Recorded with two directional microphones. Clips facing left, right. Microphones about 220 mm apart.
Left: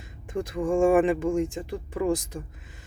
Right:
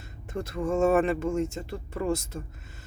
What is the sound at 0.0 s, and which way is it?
Speech, 15° left (ahead or behind).